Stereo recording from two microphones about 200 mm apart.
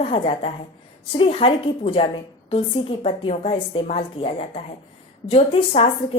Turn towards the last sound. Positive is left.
turn(degrees=30)  # may be behind; listen again after turning